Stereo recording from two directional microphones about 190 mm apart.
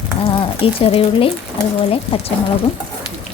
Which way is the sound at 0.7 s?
30° left (ahead or behind).